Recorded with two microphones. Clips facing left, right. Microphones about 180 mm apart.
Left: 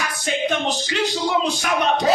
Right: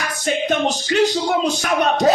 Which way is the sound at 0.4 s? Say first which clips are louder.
Right 2 dB; 45° right (ahead or behind).